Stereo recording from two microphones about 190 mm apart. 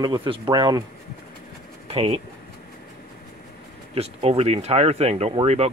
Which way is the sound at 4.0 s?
30° right (ahead or behind).